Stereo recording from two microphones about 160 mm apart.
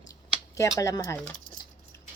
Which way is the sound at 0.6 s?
20° left (ahead or behind).